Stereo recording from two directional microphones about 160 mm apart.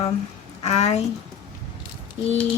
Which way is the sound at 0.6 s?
40° left (ahead or behind).